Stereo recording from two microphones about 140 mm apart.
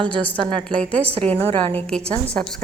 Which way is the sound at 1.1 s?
40° right (ahead or behind).